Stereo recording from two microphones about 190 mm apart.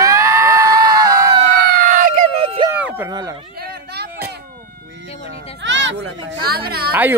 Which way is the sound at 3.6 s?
60° right (ahead or behind).